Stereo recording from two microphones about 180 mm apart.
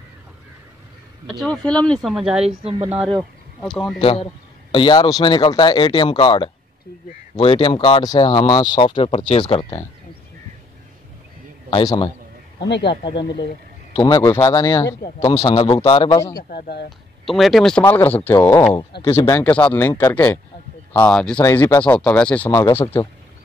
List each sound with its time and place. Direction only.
1.4 s speech: 5° left (ahead or behind)
2.4 s speech: 35° right (ahead or behind)
3.1 s speech: centre (ahead or behind)
4.0 s a man's voice: 30° left (ahead or behind)
11.7 s speech: 25° left (ahead or behind)
12.6 s speech: 70° left (ahead or behind)
12.9 s speech: 25° left (ahead or behind)
15.6 s speech: 30° left (ahead or behind)
16.3 s speech: 60° left (ahead or behind)
17.3 s speech: centre (ahead or behind); by 20.3 s 15° left (ahead or behind)
21.0 s speech: 5° left (ahead or behind)